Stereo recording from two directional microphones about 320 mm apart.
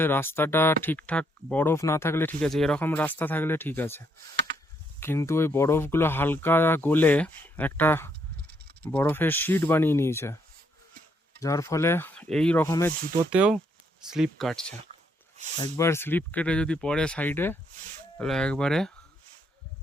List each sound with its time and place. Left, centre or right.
0.0 s speech: centre
4.5 s a sound: right
4.9 s speech: centre
11.3 s speech: centre
13.3 s speech: centre
15.6 s speech: centre